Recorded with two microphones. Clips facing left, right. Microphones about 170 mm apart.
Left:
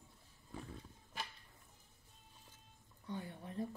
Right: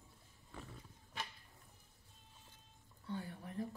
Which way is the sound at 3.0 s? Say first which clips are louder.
Even; 20° left (ahead or behind).